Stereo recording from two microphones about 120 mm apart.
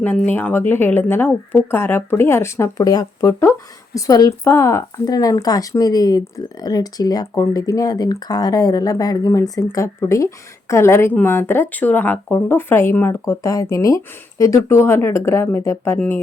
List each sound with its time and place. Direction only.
0.3 s speech: 15° left (ahead or behind)